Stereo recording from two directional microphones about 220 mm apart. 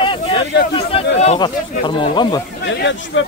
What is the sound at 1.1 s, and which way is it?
Speech, 30° left (ahead or behind).